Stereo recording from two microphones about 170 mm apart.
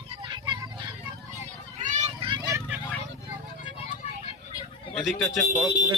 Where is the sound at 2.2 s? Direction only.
25° right (ahead or behind).